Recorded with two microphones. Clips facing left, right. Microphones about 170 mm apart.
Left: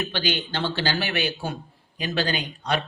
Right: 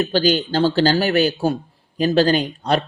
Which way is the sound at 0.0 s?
40° right (ahead or behind).